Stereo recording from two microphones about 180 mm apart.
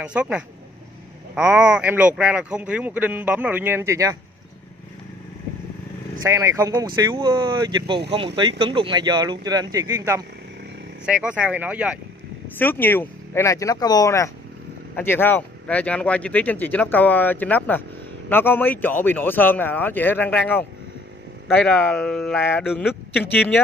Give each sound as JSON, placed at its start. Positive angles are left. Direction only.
{"t": 0.0, "sound": "speech", "side_deg": -5}
{"t": 6.2, "sound": "speech", "side_deg": -15}
{"t": 11.1, "sound": "speech", "side_deg": -5}
{"t": 12.5, "sound": "speech", "side_deg": 10}
{"t": 21.6, "sound": "speech", "side_deg": 5}